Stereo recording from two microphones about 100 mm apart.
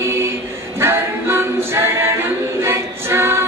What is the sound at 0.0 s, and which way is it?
Music, 25° right (ahead or behind).